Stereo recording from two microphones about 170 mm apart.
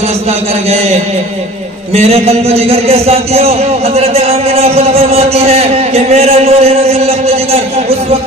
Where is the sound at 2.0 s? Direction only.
35° right (ahead or behind).